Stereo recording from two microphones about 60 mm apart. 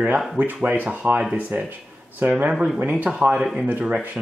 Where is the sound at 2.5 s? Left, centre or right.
Centre.